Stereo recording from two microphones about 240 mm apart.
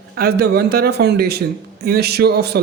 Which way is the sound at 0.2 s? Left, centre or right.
Right.